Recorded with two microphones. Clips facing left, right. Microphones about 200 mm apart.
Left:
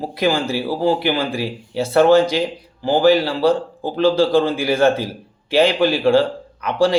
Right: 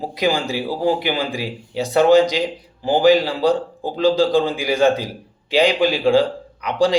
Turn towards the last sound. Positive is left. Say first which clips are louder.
# left 1 dB
turn(degrees=-15)  # may be behind; listen again after turning